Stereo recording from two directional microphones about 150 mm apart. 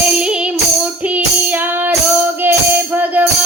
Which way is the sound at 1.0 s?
10° right (ahead or behind).